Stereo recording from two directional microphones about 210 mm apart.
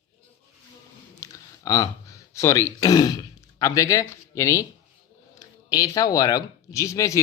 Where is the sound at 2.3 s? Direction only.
15° left (ahead or behind).